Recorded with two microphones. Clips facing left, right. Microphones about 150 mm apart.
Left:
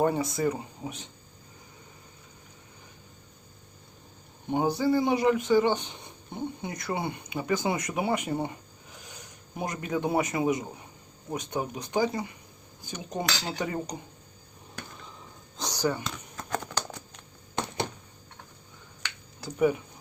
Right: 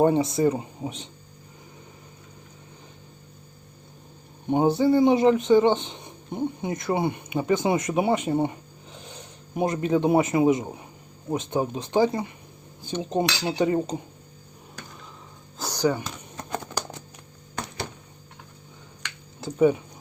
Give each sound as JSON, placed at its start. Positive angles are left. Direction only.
{"t": 0.0, "sound": "speech", "side_deg": -25}
{"t": 4.4, "sound": "speech", "side_deg": -20}
{"t": 15.5, "sound": "typing", "side_deg": -10}
{"t": 17.5, "sound": "a sound", "side_deg": 25}
{"t": 19.4, "sound": "speech", "side_deg": -25}